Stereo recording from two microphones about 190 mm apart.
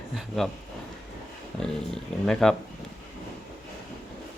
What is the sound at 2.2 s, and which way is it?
Speech, 5° left (ahead or behind).